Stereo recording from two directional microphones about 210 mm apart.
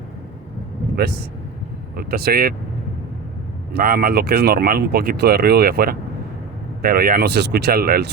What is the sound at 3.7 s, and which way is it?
Speech, 45° right (ahead or behind).